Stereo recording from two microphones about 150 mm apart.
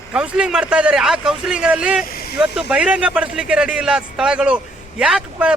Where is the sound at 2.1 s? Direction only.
90° left.